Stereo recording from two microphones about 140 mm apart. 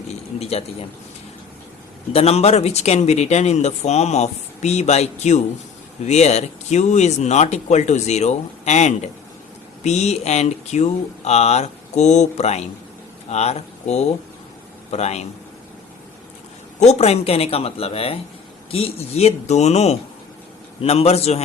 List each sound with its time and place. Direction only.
0.1 s speech: 50° left (ahead or behind)
2.1 s a man's voice: 45° left (ahead or behind)
16.8 s speech: 50° left (ahead or behind)